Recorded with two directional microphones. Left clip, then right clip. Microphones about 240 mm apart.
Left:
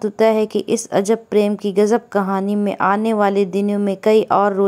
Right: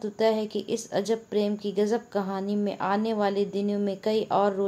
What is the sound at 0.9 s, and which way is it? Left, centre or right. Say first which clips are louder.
A woman's voice: left 10 dB; left.